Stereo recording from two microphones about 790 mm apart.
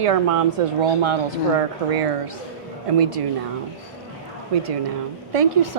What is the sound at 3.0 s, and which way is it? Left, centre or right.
Speech, right.